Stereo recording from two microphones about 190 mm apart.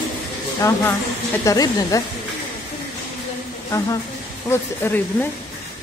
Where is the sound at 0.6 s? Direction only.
15° left (ahead or behind).